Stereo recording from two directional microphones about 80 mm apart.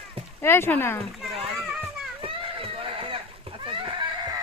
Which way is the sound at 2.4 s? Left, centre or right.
Right.